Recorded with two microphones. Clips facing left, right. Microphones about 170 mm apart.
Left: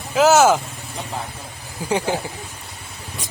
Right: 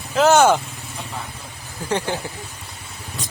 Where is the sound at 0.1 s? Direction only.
5° left (ahead or behind).